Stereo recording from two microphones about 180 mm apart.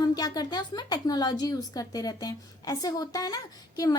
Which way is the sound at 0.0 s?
20° left (ahead or behind).